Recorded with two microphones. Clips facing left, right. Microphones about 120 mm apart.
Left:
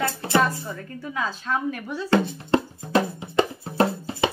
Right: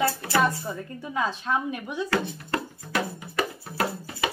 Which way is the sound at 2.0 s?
25° left (ahead or behind).